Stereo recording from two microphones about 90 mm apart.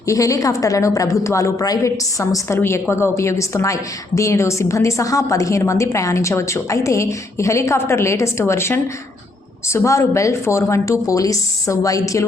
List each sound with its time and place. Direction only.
0.0 s a woman's voice: 35° left (ahead or behind)